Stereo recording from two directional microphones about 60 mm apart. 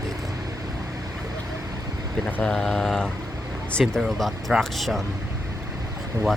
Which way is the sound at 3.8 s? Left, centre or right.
Centre.